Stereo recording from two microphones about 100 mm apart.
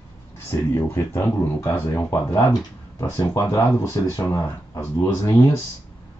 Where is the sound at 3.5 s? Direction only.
30° left (ahead or behind).